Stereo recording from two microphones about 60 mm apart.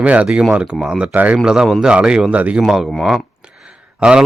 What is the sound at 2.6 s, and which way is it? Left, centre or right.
Speech, centre.